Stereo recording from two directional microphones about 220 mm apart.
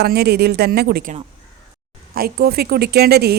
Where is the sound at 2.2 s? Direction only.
45° right (ahead or behind).